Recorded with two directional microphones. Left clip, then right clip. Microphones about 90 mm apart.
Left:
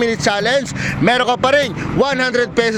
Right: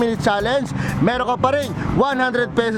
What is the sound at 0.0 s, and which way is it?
Speech, 30° right (ahead or behind).